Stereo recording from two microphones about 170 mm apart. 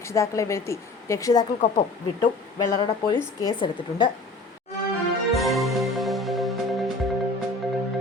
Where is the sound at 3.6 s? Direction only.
30° left (ahead or behind).